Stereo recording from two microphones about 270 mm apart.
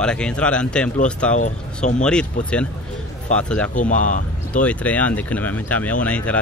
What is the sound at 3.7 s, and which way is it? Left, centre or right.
Speech, left.